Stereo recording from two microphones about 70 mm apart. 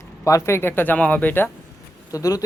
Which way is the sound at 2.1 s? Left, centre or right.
Left.